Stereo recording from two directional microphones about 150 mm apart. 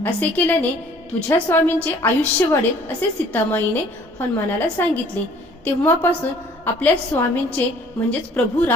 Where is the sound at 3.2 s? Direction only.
10° left (ahead or behind).